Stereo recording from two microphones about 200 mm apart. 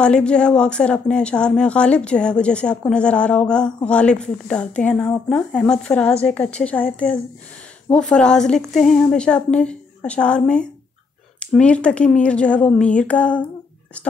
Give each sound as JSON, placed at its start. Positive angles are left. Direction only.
{"t": 0.0, "sound": "speech", "side_deg": 5}